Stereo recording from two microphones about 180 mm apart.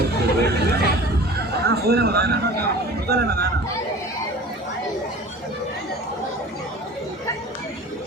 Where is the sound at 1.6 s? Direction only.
60° right (ahead or behind).